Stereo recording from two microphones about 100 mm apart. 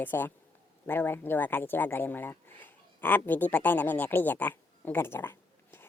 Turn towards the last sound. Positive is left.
turn(degrees=20)  # may be behind; listen again after turning